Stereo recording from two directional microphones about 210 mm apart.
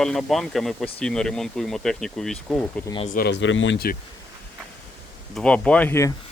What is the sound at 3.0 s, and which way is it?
Speech, 45° left (ahead or behind).